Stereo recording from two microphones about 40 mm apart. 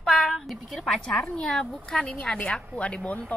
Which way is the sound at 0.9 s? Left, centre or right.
Centre.